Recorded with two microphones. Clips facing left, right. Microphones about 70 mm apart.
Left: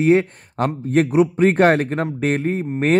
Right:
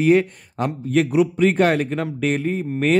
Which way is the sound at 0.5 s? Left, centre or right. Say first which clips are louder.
Left 2 dB; left.